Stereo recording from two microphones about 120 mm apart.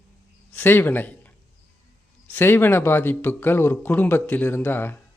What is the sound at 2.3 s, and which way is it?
A man's voice, 20° left (ahead or behind).